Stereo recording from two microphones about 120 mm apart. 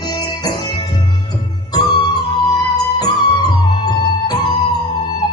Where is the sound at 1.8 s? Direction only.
35° left (ahead or behind).